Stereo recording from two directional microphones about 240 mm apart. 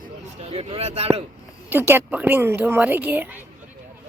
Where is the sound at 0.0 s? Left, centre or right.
Right.